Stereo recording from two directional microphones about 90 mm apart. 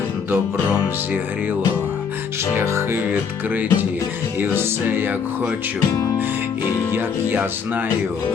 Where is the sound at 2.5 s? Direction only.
30° right (ahead or behind).